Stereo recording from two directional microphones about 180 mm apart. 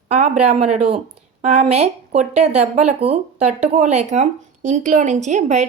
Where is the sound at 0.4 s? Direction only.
35° right (ahead or behind).